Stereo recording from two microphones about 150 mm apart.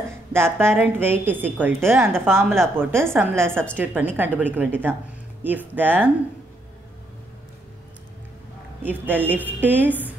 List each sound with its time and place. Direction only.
0.3 s a woman's voice: 15° right (ahead or behind)
8.8 s a woman's voice: 15° right (ahead or behind)